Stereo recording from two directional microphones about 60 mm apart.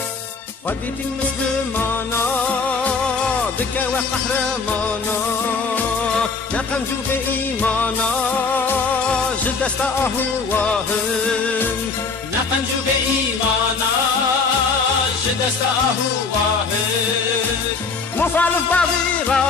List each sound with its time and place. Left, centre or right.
18.2 s music: left
18.8 s music: centre